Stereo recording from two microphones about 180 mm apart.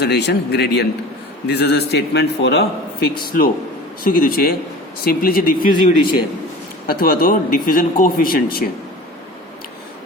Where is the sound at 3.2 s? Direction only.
50° left (ahead or behind).